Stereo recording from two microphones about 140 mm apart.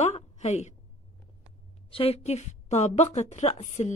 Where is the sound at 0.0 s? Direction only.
50° left (ahead or behind).